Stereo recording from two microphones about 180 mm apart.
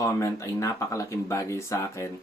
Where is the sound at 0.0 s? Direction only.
15° left (ahead or behind).